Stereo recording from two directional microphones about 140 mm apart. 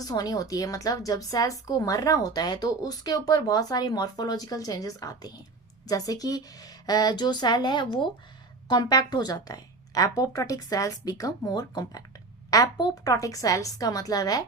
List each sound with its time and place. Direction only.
0.0 s a woman's voice: 25° left (ahead or behind)